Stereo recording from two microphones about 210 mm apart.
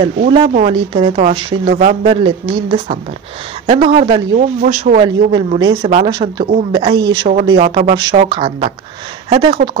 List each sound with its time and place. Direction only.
0.3 s speech: 30° right (ahead or behind)
5.0 s speech: 20° right (ahead or behind)